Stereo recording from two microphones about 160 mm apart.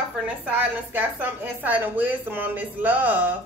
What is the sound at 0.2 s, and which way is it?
A woman's voice, 10° right (ahead or behind).